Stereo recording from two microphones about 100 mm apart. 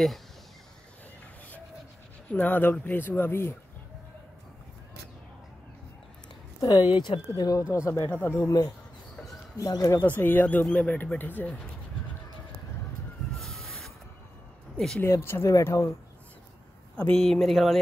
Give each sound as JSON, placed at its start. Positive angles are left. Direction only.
{"t": 2.3, "sound": "speech", "side_deg": 15}
{"t": 6.6, "sound": "speech", "side_deg": 40}
{"t": 7.7, "sound": "speech", "side_deg": 25}
{"t": 9.2, "sound": "bird", "side_deg": 40}
{"t": 10.0, "sound": "speech", "side_deg": 20}
{"t": 13.4, "sound": "a sound", "side_deg": 0}
{"t": 15.0, "sound": "speech", "side_deg": 25}
{"t": 16.9, "sound": "speech", "side_deg": 10}